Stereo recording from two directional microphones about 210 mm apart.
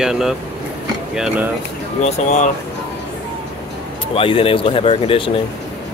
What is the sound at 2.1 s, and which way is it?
Speech, 35° left (ahead or behind).